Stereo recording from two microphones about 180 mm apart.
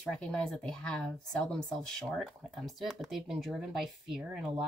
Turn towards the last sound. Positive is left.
turn(degrees=-5)  # may be behind; listen again after turning